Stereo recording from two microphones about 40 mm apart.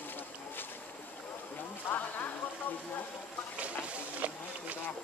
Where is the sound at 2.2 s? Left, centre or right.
Left.